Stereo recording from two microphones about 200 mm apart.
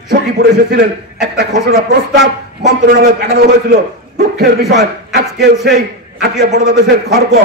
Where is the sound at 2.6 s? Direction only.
50° right (ahead or behind).